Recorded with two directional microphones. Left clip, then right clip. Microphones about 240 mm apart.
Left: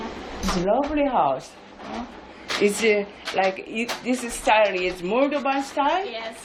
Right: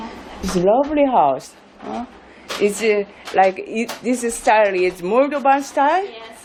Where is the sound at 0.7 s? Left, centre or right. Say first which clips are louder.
Right 7 dB; right.